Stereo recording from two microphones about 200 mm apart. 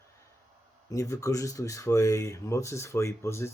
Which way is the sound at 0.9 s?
15° left (ahead or behind).